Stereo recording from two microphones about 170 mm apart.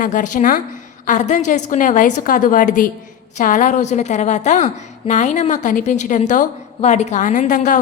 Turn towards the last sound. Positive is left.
turn(degrees=50)  # may be behind; listen again after turning